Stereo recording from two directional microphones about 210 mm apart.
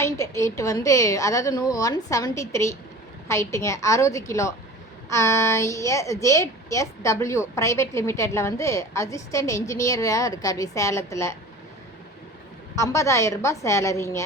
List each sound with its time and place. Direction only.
0.0 s a woman's voice: 15° left (ahead or behind)
12.7 s a woman's voice: 15° left (ahead or behind)